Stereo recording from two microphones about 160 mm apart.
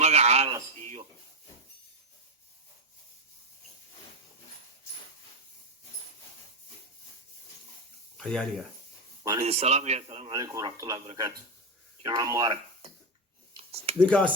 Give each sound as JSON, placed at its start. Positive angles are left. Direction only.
{"t": 0.0, "sound": "a sound", "side_deg": -40}
{"t": 8.2, "sound": "speech", "side_deg": 5}
{"t": 9.4, "sound": "a man's voice", "side_deg": -40}
{"t": 10.3, "sound": "speech", "side_deg": -20}
{"t": 12.0, "sound": "speech", "side_deg": -20}
{"t": 13.7, "sound": "a sound", "side_deg": -40}
{"t": 14.0, "sound": "speech", "side_deg": 5}